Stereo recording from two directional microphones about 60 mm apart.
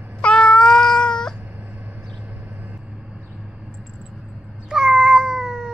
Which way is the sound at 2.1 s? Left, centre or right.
Right.